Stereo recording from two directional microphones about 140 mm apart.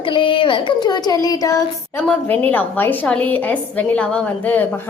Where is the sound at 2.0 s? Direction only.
10° left (ahead or behind).